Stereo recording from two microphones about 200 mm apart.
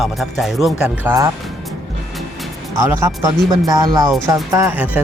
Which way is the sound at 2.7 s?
10° right (ahead or behind).